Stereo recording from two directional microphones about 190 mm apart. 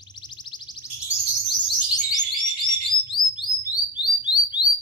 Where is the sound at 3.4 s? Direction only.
20° left (ahead or behind).